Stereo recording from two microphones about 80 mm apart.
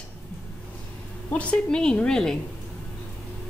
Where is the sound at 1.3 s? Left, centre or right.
Centre.